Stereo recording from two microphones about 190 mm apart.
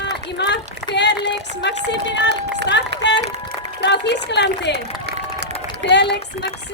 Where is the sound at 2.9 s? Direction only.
60° right (ahead or behind).